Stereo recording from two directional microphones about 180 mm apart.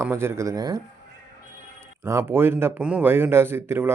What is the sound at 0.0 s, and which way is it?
Speech, 15° right (ahead or behind).